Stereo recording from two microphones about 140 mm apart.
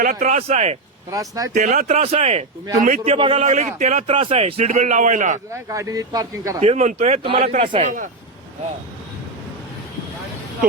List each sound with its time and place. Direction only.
0.0 s a man's voice: 65° right (ahead or behind); by 0.8 s 50° right (ahead or behind)
1.1 s speech: 25° right (ahead or behind)
1.5 s a man's voice: 70° right (ahead or behind); by 3.4 s 40° right (ahead or behind)
3.4 s a man's voice: 55° right (ahead or behind)
4.1 s speech: 45° right (ahead or behind)
4.7 s a man's voice: 60° right (ahead or behind)
5.6 s speech: 25° right (ahead or behind)
6.6 s speech: 55° right (ahead or behind)
7.3 s a man's voice: 40° right (ahead or behind)
7.8 s a man's voice: 65° right (ahead or behind)